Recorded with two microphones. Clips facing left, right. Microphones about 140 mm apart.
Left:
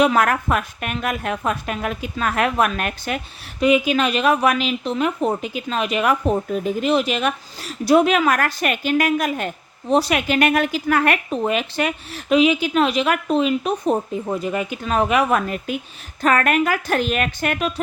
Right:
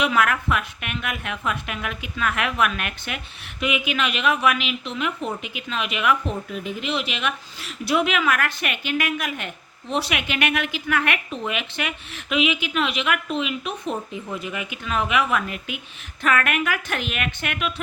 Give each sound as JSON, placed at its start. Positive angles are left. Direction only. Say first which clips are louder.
{"t": 0.0, "sound": "speech", "louder": "left 5 dB", "side_deg": 40}